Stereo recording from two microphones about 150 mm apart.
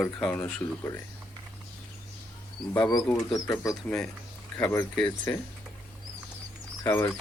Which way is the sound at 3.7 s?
Centre (ahead or behind).